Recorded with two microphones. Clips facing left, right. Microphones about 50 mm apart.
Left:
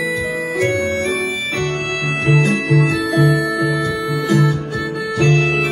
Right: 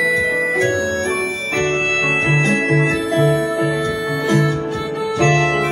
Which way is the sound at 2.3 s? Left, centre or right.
Right.